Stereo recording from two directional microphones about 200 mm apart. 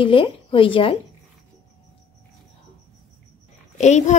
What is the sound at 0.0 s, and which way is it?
Speech, 25° left (ahead or behind).